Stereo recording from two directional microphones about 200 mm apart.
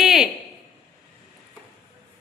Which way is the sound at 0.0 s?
Centre (ahead or behind).